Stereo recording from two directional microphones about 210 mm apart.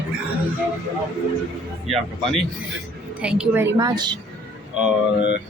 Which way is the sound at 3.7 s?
20° right (ahead or behind).